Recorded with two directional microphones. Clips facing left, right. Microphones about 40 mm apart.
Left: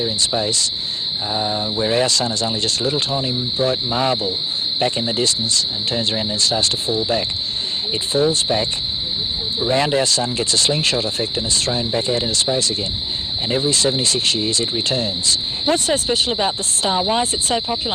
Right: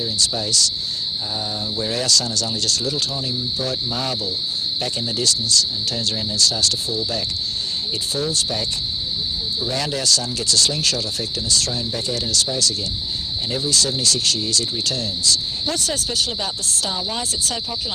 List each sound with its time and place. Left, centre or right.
0.0 s speech: left